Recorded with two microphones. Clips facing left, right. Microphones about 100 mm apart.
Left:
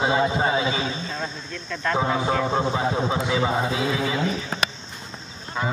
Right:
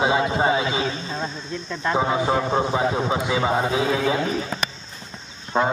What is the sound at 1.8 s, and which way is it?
A man's voice, 15° right (ahead or behind).